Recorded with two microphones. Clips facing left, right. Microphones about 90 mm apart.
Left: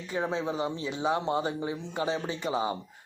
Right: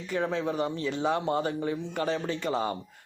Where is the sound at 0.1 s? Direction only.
20° left (ahead or behind).